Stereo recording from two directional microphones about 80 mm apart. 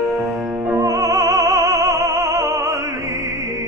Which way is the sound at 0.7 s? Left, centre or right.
Right.